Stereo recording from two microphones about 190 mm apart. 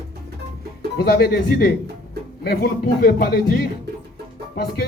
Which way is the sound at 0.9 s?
55° left (ahead or behind).